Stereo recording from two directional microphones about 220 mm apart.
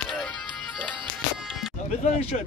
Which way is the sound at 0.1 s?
5° left (ahead or behind).